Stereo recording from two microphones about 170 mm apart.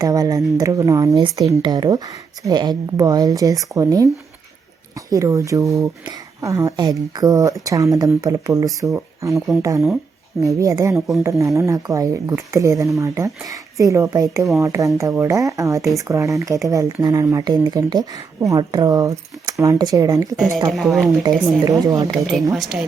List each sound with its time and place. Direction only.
0.0 s speech: 20° right (ahead or behind)
20.7 s speech: centre (ahead or behind)
21.2 s speech: 20° right (ahead or behind)
22.5 s speech: centre (ahead or behind)